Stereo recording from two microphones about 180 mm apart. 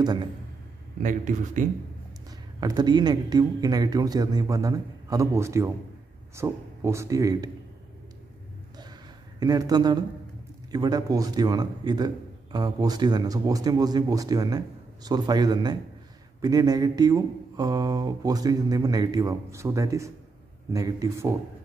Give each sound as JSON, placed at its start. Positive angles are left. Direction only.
{"t": 0.0, "sound": "speech", "side_deg": -25}
{"t": 1.0, "sound": "a man's voice", "side_deg": -45}
{"t": 2.6, "sound": "a man's voice", "side_deg": -25}
{"t": 9.4, "sound": "a man's voice", "side_deg": -20}